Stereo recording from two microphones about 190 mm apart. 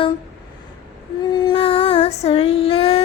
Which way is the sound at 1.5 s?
30° left (ahead or behind).